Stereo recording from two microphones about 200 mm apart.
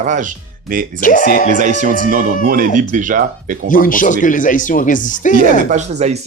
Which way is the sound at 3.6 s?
45° left (ahead or behind).